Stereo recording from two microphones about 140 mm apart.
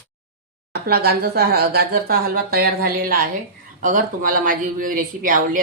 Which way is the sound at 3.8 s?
75° right (ahead or behind).